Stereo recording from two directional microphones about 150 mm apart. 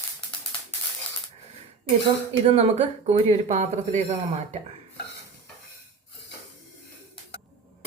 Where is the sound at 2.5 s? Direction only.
45° right (ahead or behind).